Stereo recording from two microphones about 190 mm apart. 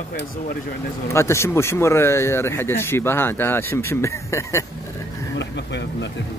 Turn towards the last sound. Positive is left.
turn(degrees=65)  # may be behind; listen again after turning